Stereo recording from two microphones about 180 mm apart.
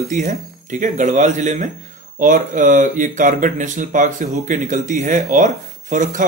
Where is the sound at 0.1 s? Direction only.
45° right (ahead or behind).